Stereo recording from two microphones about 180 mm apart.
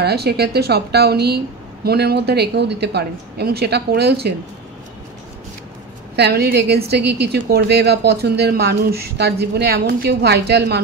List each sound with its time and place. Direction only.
0.0 s a woman's voice: 65° right (ahead or behind)
6.1 s a woman's voice: 65° right (ahead or behind)